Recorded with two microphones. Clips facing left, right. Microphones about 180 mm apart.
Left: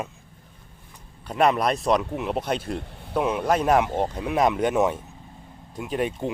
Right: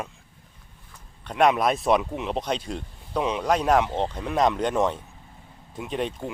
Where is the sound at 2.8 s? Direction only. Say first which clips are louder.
Left 5 dB; 70° left (ahead or behind).